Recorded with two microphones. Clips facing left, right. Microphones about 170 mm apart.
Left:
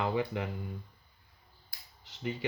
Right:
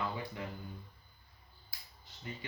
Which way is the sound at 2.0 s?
85° left.